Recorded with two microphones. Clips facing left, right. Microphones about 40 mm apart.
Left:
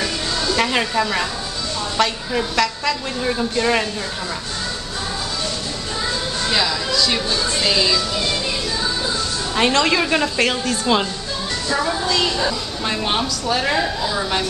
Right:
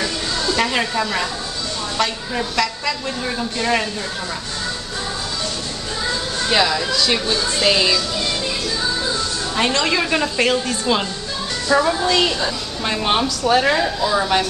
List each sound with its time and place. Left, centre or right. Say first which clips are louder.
0.0 s music: even; centre
2.0 s a woman's voice: left 2 dB; centre
6.5 s speech: right 3 dB; centre
9.6 s a woman's voice: left 2 dB; centre
11.7 s a woman's voice: right 4 dB; centre
12.4 s a woman's voice: left 1 dB; centre
14.0 s a woman's voice: right 4 dB; centre